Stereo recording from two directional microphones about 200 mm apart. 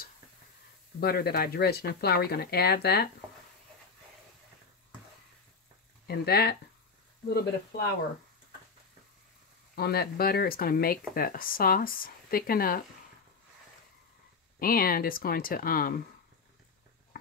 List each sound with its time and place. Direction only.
1.0 s speech: 50° left (ahead or behind)
6.0 s speech: 50° left (ahead or behind)
9.8 s speech: 50° left (ahead or behind)
14.6 s speech: 45° left (ahead or behind)